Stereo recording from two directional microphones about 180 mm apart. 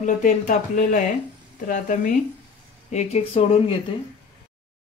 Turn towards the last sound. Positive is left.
turn(degrees=30)  # may be behind; listen again after turning